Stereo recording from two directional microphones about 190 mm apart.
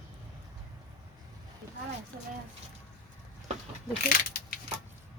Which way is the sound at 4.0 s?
50° left (ahead or behind).